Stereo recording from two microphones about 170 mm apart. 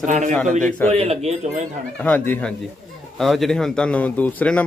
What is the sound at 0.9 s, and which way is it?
Speech, 40° right (ahead or behind).